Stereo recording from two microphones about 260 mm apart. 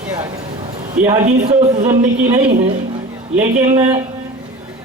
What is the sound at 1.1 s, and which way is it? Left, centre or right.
A man's voice, right.